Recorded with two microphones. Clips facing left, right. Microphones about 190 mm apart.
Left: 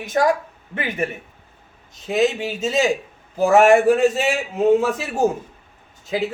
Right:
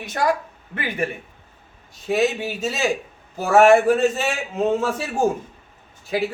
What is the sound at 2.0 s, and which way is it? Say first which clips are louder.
Speech: left 1 dB; 20° left (ahead or behind).